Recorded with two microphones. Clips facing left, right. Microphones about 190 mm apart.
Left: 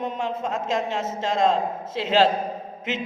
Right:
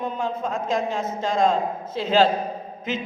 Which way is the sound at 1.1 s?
25° left (ahead or behind).